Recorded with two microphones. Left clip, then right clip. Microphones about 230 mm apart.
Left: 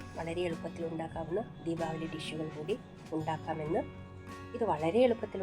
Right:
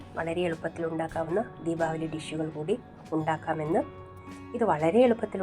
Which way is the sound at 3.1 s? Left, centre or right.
Centre.